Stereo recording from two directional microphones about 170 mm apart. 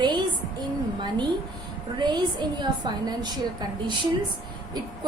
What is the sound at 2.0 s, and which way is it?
A woman's voice, 25° right (ahead or behind).